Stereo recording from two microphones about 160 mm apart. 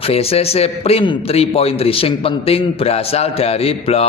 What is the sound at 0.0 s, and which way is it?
A man's voice, 40° left (ahead or behind).